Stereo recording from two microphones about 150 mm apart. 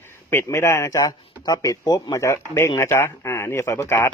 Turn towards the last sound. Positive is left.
turn(degrees=15)  # may be behind; listen again after turning